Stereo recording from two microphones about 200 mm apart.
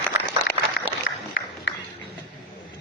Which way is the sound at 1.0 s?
60° left (ahead or behind).